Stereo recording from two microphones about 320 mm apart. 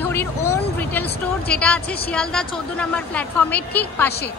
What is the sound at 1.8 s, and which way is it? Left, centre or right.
Speech, left.